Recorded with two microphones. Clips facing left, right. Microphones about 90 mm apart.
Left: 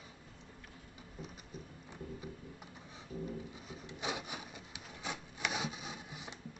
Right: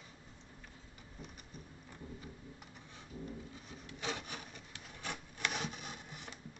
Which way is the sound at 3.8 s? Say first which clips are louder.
Left 1 dB; 15° left (ahead or behind).